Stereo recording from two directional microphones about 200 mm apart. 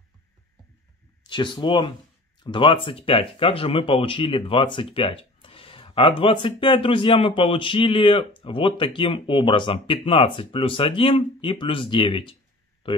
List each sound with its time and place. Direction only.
1.2 s speech: 25° left (ahead or behind)